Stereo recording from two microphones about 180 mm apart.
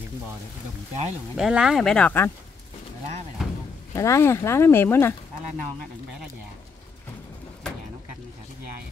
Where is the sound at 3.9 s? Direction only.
15° left (ahead or behind).